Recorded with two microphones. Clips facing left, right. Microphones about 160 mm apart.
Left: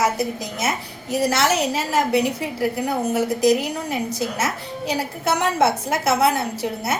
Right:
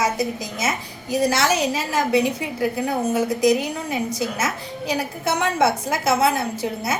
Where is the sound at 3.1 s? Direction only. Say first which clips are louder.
Left 1 dB; 30° left (ahead or behind).